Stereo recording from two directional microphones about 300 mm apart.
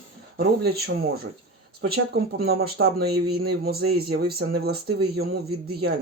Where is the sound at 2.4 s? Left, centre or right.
Right.